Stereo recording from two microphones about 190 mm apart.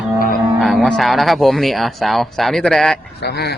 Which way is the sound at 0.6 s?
Centre (ahead or behind).